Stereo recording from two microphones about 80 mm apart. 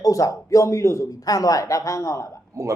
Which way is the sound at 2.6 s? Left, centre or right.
Right.